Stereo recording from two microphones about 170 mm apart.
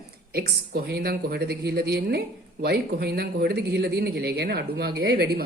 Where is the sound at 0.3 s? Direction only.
70° right (ahead or behind).